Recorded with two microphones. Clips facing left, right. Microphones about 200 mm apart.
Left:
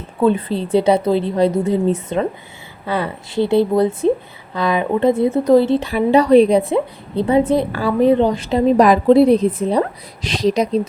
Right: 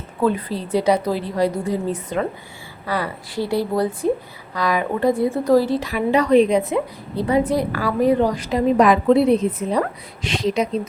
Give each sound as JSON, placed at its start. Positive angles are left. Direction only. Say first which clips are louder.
{"t": 0.2, "sound": "a woman's voice", "louder": "left 4 dB", "side_deg": 25}